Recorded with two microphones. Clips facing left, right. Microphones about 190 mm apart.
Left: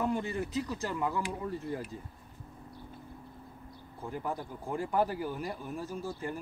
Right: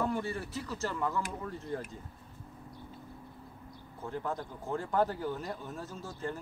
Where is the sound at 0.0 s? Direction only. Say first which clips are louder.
Left 1 dB; 15° left (ahead or behind).